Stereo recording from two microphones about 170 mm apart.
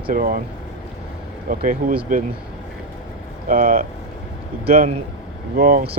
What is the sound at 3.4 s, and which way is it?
Speech, 55° right (ahead or behind).